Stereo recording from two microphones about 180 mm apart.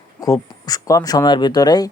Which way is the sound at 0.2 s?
20° left (ahead or behind).